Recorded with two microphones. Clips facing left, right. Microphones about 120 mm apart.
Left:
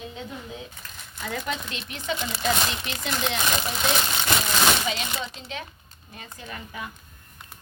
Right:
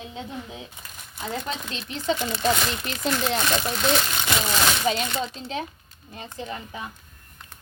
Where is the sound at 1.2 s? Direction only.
30° right (ahead or behind).